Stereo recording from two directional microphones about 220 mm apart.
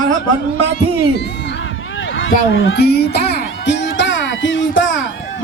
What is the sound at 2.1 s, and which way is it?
Speech, 60° left (ahead or behind).